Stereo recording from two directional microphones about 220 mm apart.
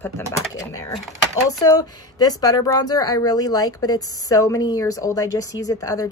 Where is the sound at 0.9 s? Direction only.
Centre (ahead or behind).